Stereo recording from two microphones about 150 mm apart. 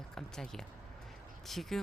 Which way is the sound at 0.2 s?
5° left (ahead or behind).